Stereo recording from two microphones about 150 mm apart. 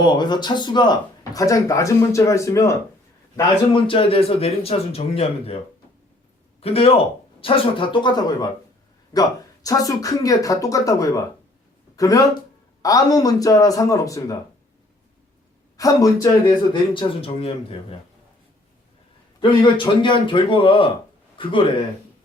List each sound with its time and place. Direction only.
0.0 s speech: 30° left (ahead or behind)
3.7 s speech: 35° left (ahead or behind)
6.6 s speech: 40° left (ahead or behind)
9.6 s speech: 25° left (ahead or behind)
15.8 s speech: 25° left (ahead or behind)
16.9 s speech: 35° left (ahead or behind)
19.4 s speech: 35° left (ahead or behind)